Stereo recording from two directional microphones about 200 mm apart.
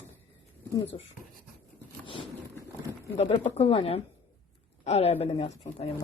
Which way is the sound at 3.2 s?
30° left (ahead or behind).